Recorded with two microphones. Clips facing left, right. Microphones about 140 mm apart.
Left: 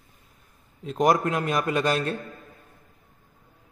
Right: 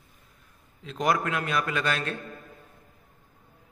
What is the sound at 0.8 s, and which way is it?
A man's voice, 45° left (ahead or behind).